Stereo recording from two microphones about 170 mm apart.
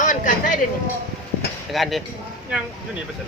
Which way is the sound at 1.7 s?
Centre (ahead or behind).